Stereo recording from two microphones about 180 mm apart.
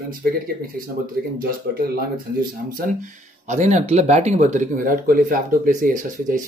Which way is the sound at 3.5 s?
40° right (ahead or behind).